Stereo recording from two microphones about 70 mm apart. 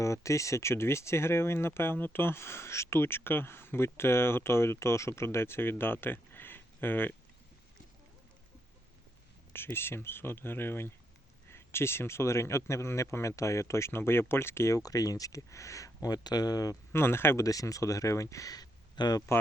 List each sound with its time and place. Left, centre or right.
0.0 s speech: left
9.5 s speech: left
14.8 s speech: left
16.9 s speech: left
17.4 s speech: left